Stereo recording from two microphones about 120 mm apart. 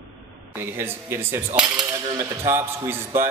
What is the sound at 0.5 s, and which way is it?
A man's voice, 20° right (ahead or behind).